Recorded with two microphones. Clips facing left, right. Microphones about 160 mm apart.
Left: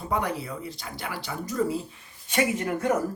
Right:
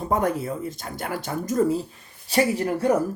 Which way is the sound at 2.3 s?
35° right (ahead or behind).